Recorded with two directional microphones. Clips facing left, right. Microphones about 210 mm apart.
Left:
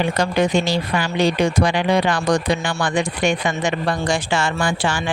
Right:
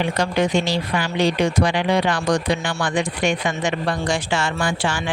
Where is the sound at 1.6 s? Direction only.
45° left (ahead or behind).